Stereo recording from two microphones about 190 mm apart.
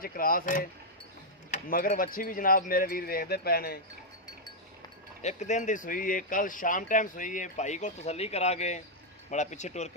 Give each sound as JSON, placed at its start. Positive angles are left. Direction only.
{"t": 0.0, "sound": "speech", "side_deg": 50}
{"t": 1.7, "sound": "speech", "side_deg": 50}
{"t": 5.2, "sound": "speech", "side_deg": 35}